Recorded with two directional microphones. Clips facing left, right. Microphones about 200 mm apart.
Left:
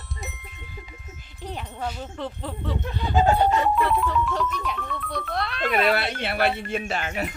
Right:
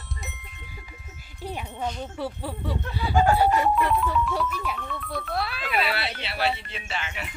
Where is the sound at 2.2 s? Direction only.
10° right (ahead or behind).